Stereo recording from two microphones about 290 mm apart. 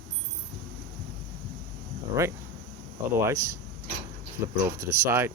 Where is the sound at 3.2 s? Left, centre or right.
Centre.